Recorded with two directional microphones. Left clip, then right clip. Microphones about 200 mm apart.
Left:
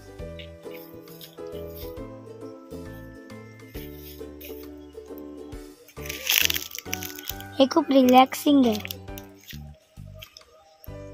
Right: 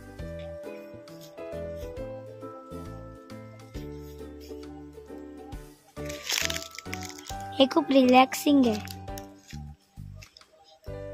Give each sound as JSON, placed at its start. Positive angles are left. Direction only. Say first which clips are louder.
{"t": 6.0, "sound": "music", "louder": "left 6 dB", "side_deg": 15}
{"t": 7.5, "sound": "speech", "louder": "left 2 dB", "side_deg": 20}
{"t": 8.7, "sound": "music", "louder": "left 2 dB", "side_deg": 0}